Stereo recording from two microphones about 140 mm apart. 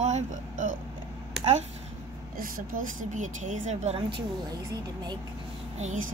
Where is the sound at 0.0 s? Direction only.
60° right (ahead or behind).